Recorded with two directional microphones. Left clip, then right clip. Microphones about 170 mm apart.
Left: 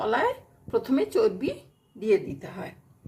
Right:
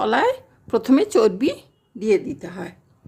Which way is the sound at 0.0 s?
75° right (ahead or behind).